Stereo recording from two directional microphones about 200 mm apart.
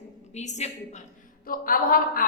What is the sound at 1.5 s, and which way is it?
Speech, 45° left (ahead or behind).